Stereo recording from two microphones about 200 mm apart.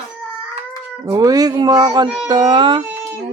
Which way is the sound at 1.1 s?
20° right (ahead or behind).